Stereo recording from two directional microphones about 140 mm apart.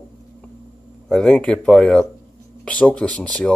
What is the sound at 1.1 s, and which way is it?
Speech, 5° left (ahead or behind).